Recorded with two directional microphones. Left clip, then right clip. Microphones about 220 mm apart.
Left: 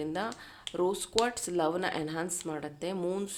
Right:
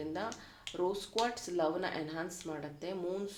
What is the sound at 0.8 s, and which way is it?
A woman's voice, 35° left (ahead or behind).